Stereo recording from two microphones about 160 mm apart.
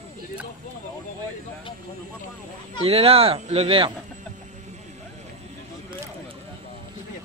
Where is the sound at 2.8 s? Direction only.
35° right (ahead or behind).